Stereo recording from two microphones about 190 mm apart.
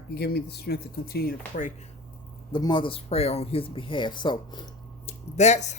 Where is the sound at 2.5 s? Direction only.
25° left (ahead or behind).